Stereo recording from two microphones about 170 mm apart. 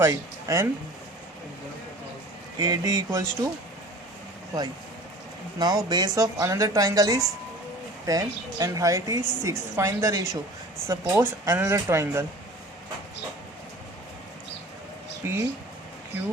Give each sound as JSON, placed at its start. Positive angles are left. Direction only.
{"t": 0.0, "sound": "speech", "side_deg": -20}
{"t": 2.6, "sound": "a woman's voice", "side_deg": -20}
{"t": 5.5, "sound": "a woman's voice", "side_deg": -25}
{"t": 15.2, "sound": "speech", "side_deg": -15}